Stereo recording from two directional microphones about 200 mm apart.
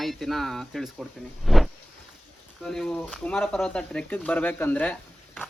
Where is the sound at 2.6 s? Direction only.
5° left (ahead or behind).